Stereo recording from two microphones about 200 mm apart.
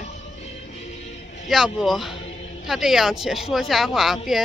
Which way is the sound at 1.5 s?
Centre (ahead or behind).